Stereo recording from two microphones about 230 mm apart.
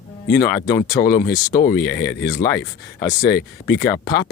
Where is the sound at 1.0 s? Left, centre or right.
Left.